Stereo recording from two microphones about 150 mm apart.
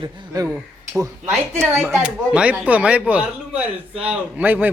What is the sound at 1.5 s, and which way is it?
Speech, 20° right (ahead or behind).